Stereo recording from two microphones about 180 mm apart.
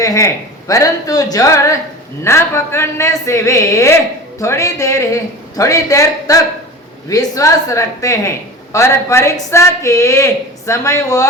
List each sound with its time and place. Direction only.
0.0 s a man's voice: 20° left (ahead or behind)